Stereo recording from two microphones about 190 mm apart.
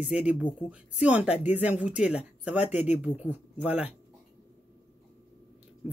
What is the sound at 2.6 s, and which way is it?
Speech, 35° left (ahead or behind).